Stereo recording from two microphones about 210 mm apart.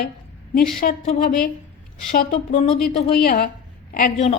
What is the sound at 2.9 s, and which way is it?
Speech, 30° left (ahead or behind).